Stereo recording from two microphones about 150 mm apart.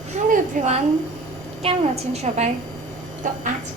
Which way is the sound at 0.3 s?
55° right (ahead or behind).